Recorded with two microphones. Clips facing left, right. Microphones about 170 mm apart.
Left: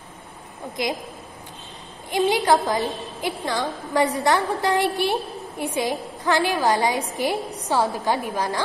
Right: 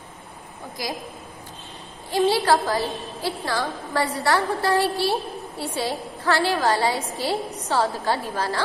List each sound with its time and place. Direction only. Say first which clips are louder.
0.8 s a woman's voice: left 5 dB; 20° left (ahead or behind)
2.0 s a woman's voice: even; 15° left (ahead or behind)